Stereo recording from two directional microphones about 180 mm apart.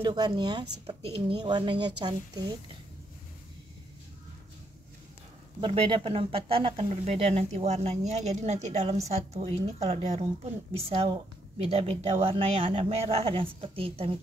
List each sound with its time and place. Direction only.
0.0 s speech: 25° right (ahead or behind)
5.6 s speech: 30° right (ahead or behind)